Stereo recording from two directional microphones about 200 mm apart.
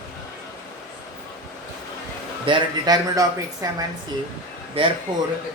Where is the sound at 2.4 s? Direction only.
20° right (ahead or behind).